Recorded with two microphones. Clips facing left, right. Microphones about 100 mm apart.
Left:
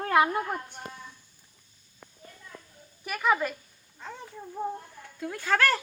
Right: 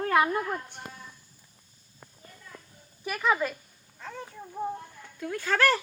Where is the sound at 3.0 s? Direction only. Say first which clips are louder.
Even; 5° left (ahead or behind).